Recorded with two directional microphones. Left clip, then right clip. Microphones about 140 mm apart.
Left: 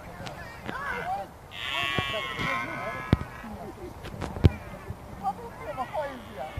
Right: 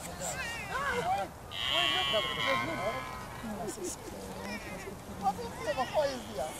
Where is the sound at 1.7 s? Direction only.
55° right (ahead or behind).